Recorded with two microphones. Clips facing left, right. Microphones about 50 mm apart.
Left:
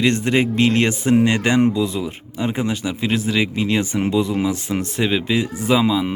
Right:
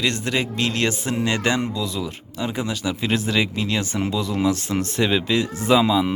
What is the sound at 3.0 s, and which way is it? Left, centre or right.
Speech, centre.